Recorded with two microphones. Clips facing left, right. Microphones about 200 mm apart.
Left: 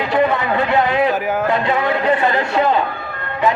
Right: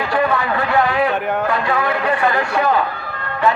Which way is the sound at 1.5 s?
20° left (ahead or behind).